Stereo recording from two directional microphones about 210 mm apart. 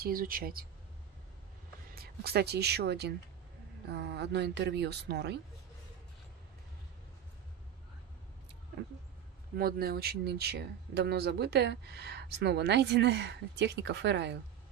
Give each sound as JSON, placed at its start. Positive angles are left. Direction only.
{"t": 0.0, "sound": "speech", "side_deg": -45}
{"t": 2.0, "sound": "speech", "side_deg": -50}
{"t": 9.6, "sound": "speech", "side_deg": -45}